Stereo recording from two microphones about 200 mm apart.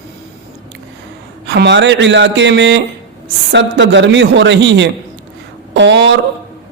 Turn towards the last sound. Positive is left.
turn(degrees=-60)  # may be behind; listen again after turning